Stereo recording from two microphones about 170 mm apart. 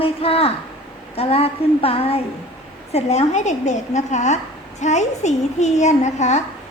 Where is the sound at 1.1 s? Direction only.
35° left (ahead or behind).